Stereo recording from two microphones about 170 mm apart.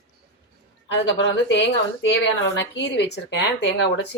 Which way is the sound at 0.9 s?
90° left.